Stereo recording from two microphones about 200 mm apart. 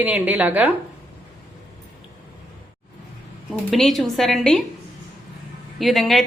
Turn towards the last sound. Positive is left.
turn(degrees=0)  # may be behind; listen again after turning